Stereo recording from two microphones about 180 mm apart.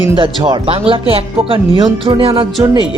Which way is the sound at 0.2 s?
30° right (ahead or behind).